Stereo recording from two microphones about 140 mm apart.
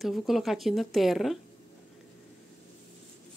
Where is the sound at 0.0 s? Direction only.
Centre (ahead or behind).